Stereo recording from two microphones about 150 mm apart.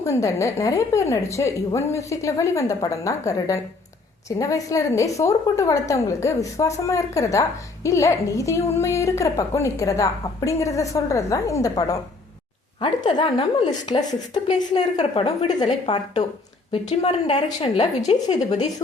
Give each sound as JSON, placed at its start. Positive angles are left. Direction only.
{"t": 0.0, "sound": "a woman's voice", "side_deg": 20}
{"t": 15.6, "sound": "a woman's voice", "side_deg": 50}